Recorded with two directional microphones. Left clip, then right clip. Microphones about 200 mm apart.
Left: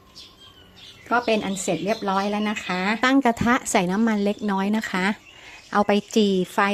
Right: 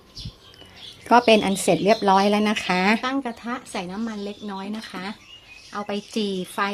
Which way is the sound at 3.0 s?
35° left (ahead or behind).